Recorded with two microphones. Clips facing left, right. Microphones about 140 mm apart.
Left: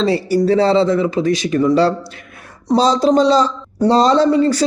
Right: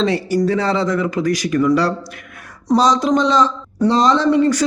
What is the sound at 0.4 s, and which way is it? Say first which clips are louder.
A man's voice: left 8 dB; 30° left (ahead or behind).